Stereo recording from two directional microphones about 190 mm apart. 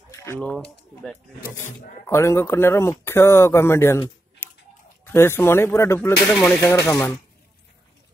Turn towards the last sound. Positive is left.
turn(degrees=15)  # may be behind; listen again after turning